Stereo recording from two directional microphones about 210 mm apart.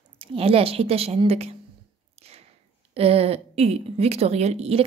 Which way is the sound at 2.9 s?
30° right (ahead or behind).